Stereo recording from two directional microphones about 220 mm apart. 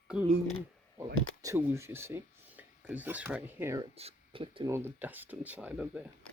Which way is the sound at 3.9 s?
25° right (ahead or behind).